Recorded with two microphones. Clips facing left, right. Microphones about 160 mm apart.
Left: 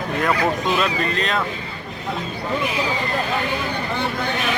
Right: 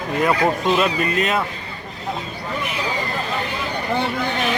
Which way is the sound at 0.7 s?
5° right (ahead or behind).